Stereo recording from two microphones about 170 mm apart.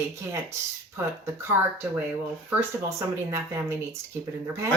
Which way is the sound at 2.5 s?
15° right (ahead or behind).